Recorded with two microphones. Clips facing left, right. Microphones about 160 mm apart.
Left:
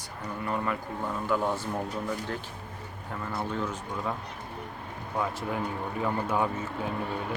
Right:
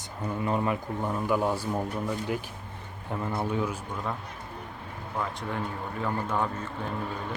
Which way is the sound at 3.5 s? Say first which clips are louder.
Right 3 dB; 10° right (ahead or behind).